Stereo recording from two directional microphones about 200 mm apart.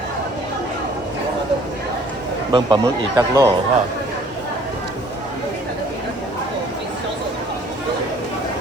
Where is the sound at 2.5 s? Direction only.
20° right (ahead or behind).